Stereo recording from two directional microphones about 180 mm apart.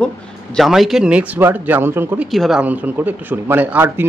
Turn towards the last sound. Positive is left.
turn(degrees=-10)  # may be behind; listen again after turning